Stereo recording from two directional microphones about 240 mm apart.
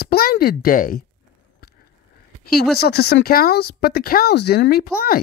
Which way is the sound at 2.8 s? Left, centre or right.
Left.